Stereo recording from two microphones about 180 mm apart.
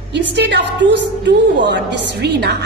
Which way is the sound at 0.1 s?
70° right (ahead or behind).